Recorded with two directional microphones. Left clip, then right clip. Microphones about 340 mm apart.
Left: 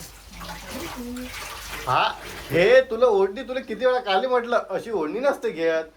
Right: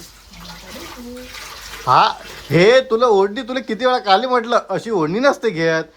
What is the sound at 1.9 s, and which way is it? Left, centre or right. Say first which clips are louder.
Speech: right 9 dB; centre.